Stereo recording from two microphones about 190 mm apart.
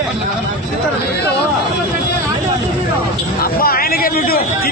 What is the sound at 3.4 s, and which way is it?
Speech, 50° left (ahead or behind).